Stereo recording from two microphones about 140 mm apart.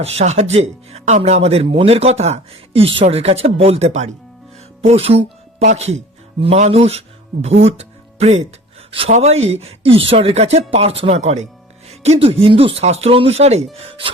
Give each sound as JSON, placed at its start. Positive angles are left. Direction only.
{"t": 0.0, "sound": "speech", "side_deg": -50}